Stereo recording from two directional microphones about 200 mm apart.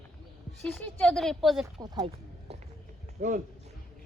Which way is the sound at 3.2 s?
40° right (ahead or behind).